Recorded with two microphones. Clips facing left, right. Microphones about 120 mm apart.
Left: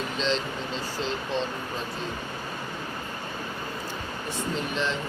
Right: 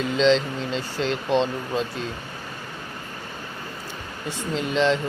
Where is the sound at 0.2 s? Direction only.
90° right; by 1.8 s 70° right (ahead or behind).